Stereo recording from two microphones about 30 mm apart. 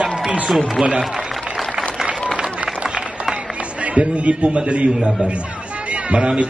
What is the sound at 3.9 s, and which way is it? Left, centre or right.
Speech, right.